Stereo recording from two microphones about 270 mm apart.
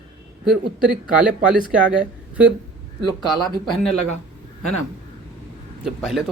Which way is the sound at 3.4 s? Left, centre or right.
Centre.